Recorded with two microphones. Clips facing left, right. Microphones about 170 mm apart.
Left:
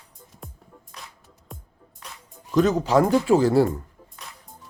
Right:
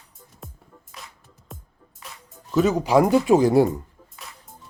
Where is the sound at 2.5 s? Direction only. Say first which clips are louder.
Even; 5° right (ahead or behind).